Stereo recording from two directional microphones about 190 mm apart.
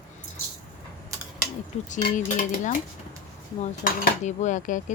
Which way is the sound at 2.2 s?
40° left (ahead or behind).